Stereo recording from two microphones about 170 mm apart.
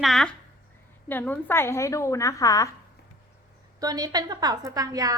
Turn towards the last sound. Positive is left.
turn(degrees=-20)  # may be behind; listen again after turning